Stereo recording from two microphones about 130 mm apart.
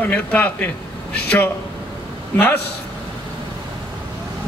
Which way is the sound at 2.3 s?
15° left (ahead or behind).